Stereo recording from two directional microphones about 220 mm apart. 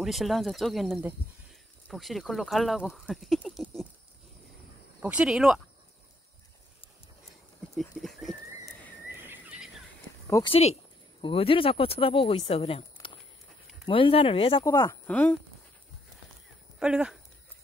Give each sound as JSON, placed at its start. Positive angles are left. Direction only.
{"t": 0.0, "sound": "speech", "side_deg": 0}
{"t": 5.0, "sound": "speech", "side_deg": -5}
{"t": 7.7, "sound": "a sound", "side_deg": 0}
{"t": 10.2, "sound": "speech", "side_deg": 15}
{"t": 10.5, "sound": "speech", "side_deg": 30}
{"t": 13.8, "sound": "speech", "side_deg": 25}
{"t": 16.8, "sound": "speech", "side_deg": -5}